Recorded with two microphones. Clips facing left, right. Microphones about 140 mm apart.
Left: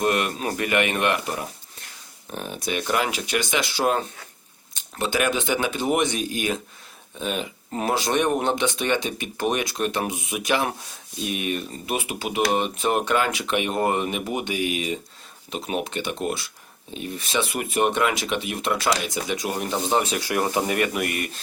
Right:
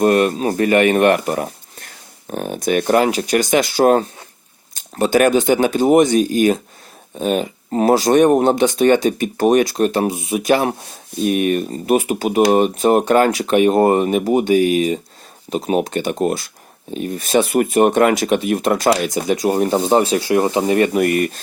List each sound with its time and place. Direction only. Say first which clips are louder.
0.0 s speech: right 9 dB; 40° right (ahead or behind)
21.0 s speech: right 11 dB; 45° right (ahead or behind)